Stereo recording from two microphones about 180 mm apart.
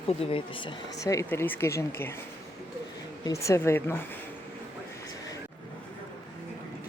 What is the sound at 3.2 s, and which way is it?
Speech, 15° left (ahead or behind).